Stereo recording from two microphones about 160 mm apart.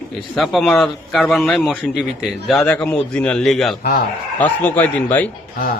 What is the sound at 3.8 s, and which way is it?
Speech, 65° left (ahead or behind).